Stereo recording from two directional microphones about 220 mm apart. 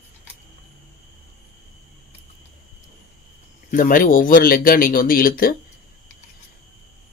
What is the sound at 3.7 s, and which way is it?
Speech, 40° left (ahead or behind).